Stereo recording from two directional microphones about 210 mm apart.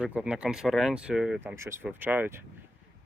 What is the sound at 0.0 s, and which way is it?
Speech, 5° right (ahead or behind).